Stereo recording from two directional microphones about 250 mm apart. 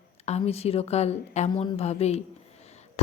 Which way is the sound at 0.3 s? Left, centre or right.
Left.